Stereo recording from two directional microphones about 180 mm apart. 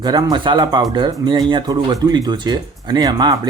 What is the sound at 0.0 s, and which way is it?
Speech, 25° right (ahead or behind).